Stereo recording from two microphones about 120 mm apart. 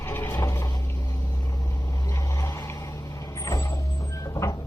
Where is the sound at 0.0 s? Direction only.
20° left (ahead or behind).